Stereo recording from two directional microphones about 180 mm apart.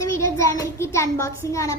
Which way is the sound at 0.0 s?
15° left (ahead or behind).